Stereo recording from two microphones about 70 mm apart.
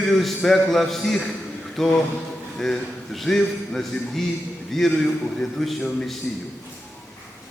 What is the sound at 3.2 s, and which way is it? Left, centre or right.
A man's voice, centre.